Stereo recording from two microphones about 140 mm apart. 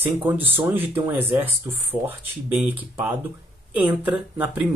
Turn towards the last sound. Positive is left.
turn(degrees=-10)  # may be behind; listen again after turning